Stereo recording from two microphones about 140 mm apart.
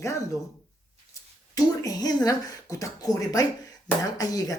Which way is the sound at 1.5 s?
25° left (ahead or behind).